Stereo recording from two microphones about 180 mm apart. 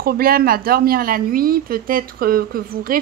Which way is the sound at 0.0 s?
55° right (ahead or behind).